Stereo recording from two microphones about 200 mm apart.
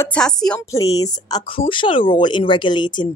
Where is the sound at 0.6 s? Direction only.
15° left (ahead or behind).